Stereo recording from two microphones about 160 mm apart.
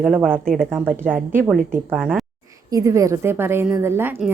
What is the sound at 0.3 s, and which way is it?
Speech, 5° left (ahead or behind).